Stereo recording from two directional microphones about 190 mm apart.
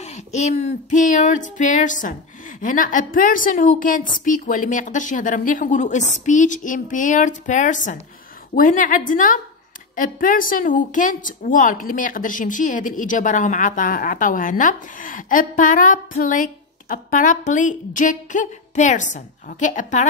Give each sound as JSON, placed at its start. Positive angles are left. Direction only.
{"t": 0.0, "sound": "a woman's voice", "side_deg": 35}